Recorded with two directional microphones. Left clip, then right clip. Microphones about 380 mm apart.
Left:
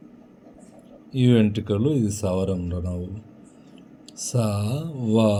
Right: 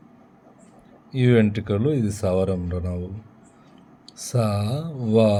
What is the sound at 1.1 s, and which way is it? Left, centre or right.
Speech, centre.